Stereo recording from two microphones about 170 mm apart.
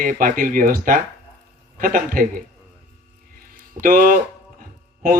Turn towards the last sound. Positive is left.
turn(degrees=-55)  # may be behind; listen again after turning